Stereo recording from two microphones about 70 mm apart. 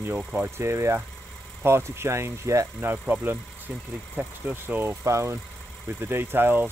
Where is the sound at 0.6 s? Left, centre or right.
Right.